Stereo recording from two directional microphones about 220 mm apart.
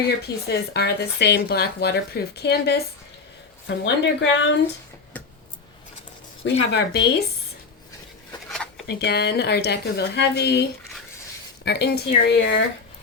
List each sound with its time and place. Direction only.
0.2 s speech: 45° left (ahead or behind)
3.8 s speech: 55° left (ahead or behind)
6.4 s speech: 55° left (ahead or behind)
8.4 s a sound: 5° left (ahead or behind)
8.9 s speech: 45° left (ahead or behind)